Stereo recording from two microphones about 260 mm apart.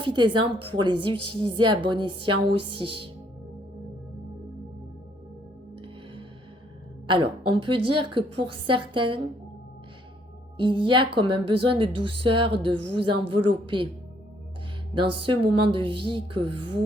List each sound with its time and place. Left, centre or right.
0.0 s a woman's voice: centre
5.7 s music: centre
7.1 s speech: centre
10.6 s speech: centre
14.9 s speech: centre